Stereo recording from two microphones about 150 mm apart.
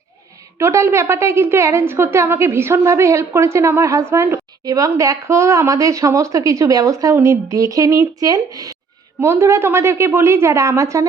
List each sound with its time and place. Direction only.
0.6 s a woman's voice: 20° right (ahead or behind)